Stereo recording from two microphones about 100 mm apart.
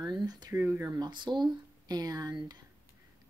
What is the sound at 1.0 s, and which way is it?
Speech, 50° right (ahead or behind).